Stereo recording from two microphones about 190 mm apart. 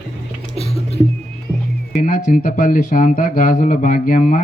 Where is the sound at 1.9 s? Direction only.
45° left (ahead or behind).